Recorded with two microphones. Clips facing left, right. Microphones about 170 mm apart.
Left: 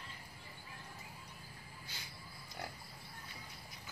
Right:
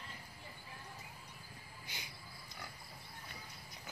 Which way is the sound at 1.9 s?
15° right (ahead or behind).